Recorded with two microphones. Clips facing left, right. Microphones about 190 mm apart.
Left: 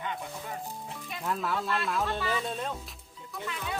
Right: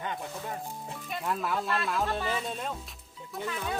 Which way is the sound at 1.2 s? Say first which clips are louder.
Even; centre (ahead or behind).